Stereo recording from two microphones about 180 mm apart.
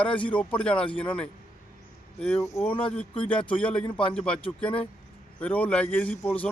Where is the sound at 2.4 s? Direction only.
15° left (ahead or behind).